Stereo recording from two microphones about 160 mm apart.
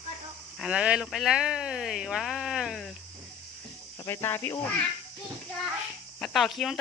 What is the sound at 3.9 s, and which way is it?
Speech, 15° left (ahead or behind).